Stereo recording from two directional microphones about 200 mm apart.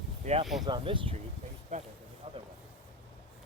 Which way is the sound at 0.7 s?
25° right (ahead or behind).